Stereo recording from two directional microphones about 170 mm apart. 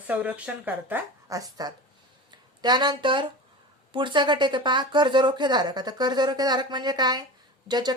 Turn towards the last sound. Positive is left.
turn(degrees=-25)  # may be behind; listen again after turning